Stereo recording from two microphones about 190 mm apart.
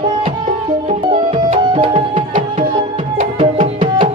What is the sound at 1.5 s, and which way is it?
Music, 30° right (ahead or behind).